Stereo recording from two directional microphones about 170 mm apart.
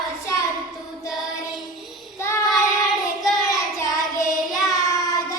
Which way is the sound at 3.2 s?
Centre (ahead or behind).